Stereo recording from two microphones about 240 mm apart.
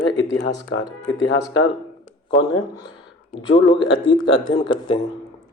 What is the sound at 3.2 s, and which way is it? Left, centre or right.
Speech, left.